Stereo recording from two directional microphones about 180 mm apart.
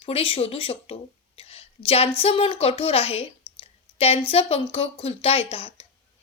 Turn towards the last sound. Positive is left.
turn(degrees=30)  # may be behind; listen again after turning